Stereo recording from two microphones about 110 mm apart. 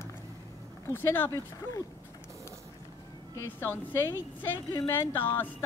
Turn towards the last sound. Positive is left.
turn(degrees=20)  # may be behind; listen again after turning